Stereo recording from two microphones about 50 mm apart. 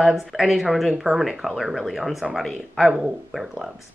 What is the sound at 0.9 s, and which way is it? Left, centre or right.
Speech, centre.